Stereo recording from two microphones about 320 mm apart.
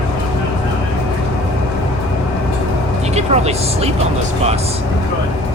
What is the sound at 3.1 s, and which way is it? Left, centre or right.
Speech, centre.